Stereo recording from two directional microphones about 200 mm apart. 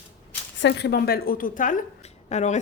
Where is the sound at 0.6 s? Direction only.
55° left (ahead or behind).